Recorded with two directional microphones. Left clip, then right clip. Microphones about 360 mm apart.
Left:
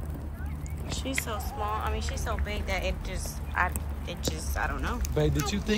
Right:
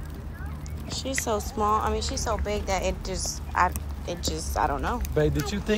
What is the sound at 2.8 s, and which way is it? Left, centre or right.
Speech, right.